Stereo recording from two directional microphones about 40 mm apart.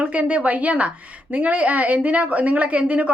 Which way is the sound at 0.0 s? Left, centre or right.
Right.